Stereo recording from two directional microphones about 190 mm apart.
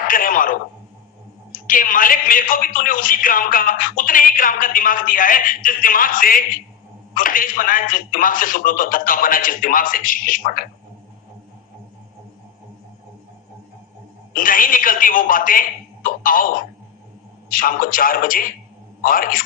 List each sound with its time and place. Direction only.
0.1 s a man's voice: 45° left (ahead or behind)
14.3 s a man's voice: 45° left (ahead or behind)